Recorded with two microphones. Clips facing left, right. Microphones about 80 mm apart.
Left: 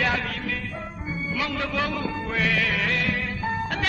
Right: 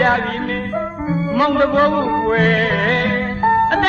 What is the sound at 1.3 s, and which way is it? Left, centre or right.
Music, right.